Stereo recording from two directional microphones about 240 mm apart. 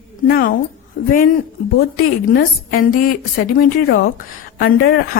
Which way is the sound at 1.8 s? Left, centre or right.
Left.